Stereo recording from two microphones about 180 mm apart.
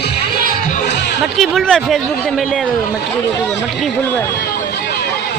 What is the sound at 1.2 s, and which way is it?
Speech, centre (ahead or behind).